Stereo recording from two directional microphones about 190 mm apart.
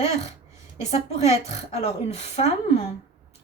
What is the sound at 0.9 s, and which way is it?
A woman's voice, 35° left (ahead or behind).